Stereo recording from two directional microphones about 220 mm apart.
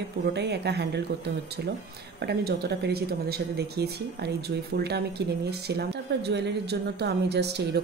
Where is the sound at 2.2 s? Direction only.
45° right (ahead or behind).